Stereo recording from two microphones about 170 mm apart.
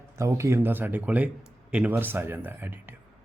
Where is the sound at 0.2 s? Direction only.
15° right (ahead or behind).